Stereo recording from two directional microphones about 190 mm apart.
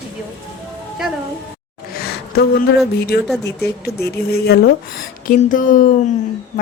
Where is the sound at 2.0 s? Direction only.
55° left (ahead or behind).